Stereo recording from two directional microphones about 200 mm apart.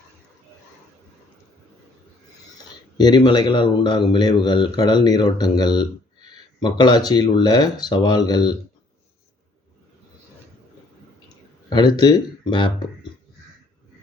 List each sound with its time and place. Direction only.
3.0 s speech: 20° left (ahead or behind)
11.7 s speech: 20° left (ahead or behind)